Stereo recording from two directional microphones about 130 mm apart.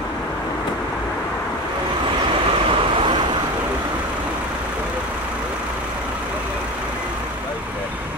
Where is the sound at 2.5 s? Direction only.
45° right (ahead or behind).